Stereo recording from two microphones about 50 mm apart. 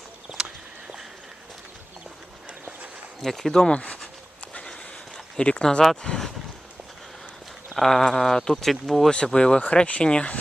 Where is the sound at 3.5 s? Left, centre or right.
Centre.